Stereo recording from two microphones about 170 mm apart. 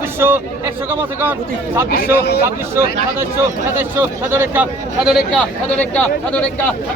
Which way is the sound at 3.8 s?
15° right (ahead or behind).